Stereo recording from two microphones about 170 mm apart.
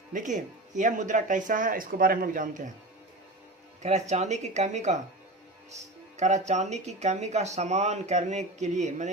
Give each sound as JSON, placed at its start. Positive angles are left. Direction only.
{"t": 0.1, "sound": "speech", "side_deg": -50}
{"t": 3.8, "sound": "speech", "side_deg": -40}